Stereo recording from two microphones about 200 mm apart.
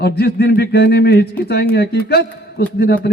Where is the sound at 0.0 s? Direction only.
55° left (ahead or behind).